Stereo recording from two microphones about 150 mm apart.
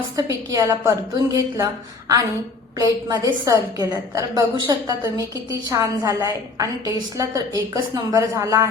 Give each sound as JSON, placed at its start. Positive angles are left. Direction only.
{"t": 0.2, "sound": "a woman's voice", "side_deg": -20}